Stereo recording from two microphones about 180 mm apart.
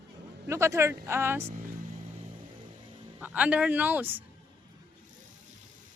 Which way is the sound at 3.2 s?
10° right (ahead or behind).